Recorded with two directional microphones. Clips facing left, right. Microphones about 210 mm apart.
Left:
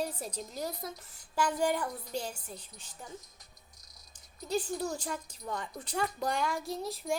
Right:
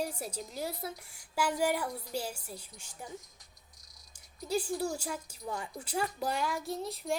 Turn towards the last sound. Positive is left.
turn(degrees=0)  # may be behind; listen again after turning